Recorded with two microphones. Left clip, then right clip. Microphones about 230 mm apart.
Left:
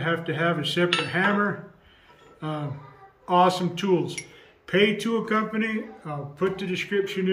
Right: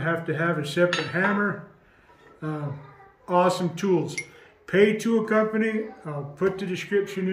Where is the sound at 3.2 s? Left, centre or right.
Centre.